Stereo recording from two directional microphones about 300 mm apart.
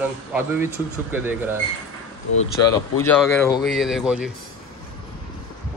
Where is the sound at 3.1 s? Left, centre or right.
Centre.